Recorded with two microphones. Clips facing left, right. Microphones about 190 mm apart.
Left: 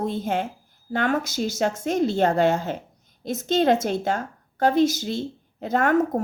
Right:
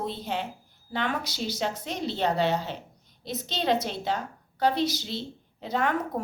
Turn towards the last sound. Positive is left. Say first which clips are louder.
# left 7 dB
turn(degrees=45)  # may be behind; listen again after turning